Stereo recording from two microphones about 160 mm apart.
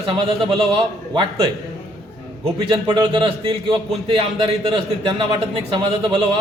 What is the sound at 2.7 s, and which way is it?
Speech, 25° right (ahead or behind).